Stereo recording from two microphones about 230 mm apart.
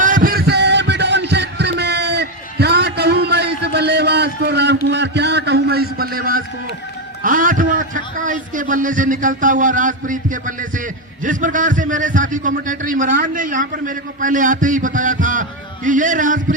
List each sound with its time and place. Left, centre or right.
0.0 s heart murmur: right
7.3 s a man's voice: right